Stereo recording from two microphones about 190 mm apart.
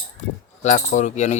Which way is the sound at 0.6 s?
40° left (ahead or behind).